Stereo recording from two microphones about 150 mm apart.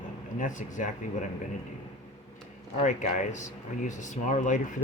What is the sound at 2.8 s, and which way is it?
Speech, 55° left (ahead or behind).